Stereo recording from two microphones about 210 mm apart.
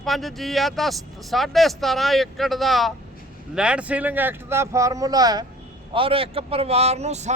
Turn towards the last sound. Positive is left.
turn(degrees=-30)  # may be behind; listen again after turning